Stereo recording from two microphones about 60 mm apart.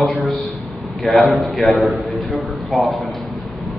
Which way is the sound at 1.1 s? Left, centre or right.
Left.